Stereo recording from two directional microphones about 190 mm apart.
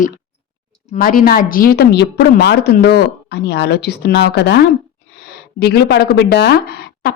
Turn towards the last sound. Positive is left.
turn(degrees=55)  # may be behind; listen again after turning